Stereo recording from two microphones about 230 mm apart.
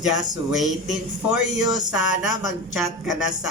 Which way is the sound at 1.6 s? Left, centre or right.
Centre.